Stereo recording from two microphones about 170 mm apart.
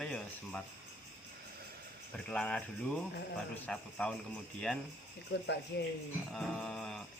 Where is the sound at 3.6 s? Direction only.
5° left (ahead or behind).